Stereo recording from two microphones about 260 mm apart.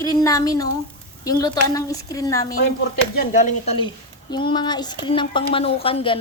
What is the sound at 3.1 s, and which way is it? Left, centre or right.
Speech, left.